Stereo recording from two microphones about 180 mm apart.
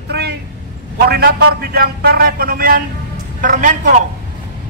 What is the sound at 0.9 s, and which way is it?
A man's voice, 65° right (ahead or behind).